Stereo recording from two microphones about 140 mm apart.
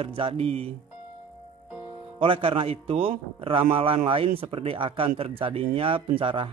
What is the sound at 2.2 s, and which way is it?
A man's voice, 40° right (ahead or behind).